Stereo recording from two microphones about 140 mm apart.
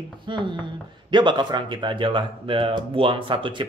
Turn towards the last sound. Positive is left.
turn(degrees=-35)  # may be behind; listen again after turning